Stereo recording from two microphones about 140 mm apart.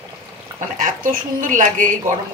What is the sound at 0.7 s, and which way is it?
Speech, 75° right (ahead or behind).